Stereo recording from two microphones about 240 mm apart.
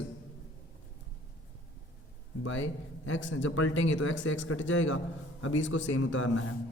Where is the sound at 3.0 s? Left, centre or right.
Left.